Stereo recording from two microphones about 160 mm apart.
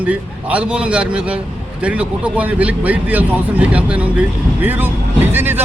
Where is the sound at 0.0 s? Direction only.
10° right (ahead or behind).